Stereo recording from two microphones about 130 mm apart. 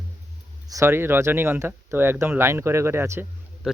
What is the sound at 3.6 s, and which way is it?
Speech, 5° right (ahead or behind).